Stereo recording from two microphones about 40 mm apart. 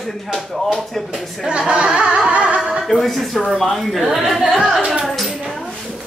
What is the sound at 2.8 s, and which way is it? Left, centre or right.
Speech, centre.